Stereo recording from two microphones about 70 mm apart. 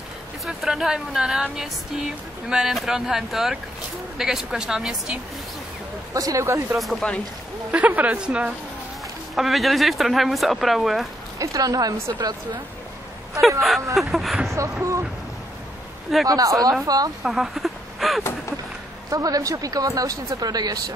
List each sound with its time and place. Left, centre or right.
0.5 s speech: centre
6.1 s speech: right
7.0 s speech: centre
7.7 s a woman's voice: right
9.3 s speech: centre
11.3 s speech: right
13.4 s speech: centre
14.5 s speech: right
16.3 s speech: right
17.2 s a sound: centre
19.0 s speech: right